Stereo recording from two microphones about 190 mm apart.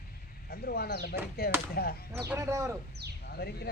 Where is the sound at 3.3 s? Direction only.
55° left (ahead or behind).